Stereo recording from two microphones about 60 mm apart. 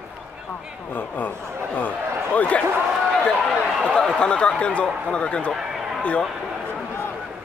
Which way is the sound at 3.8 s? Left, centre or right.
Centre.